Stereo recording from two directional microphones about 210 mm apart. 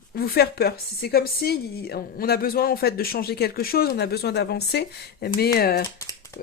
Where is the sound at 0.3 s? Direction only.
45° left (ahead or behind).